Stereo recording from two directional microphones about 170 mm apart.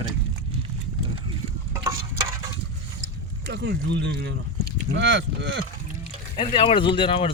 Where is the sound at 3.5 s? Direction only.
90° right.